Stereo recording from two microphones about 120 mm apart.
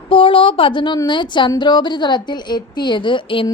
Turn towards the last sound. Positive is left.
turn(degrees=45)  # may be behind; listen again after turning